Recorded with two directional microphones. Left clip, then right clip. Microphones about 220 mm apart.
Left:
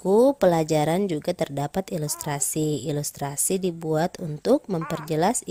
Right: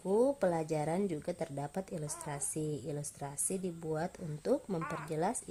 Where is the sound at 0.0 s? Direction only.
40° left (ahead or behind).